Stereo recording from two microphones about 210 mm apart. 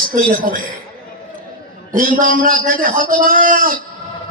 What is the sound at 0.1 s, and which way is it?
Speech, 40° right (ahead or behind).